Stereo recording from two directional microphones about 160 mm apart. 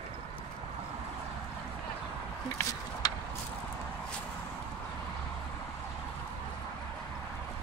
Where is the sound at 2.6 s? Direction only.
20° left (ahead or behind).